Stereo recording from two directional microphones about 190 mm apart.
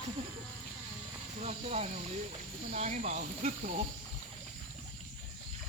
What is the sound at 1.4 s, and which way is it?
Speech, 35° right (ahead or behind).